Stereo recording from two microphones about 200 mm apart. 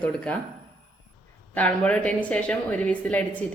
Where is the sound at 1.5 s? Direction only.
5° left (ahead or behind).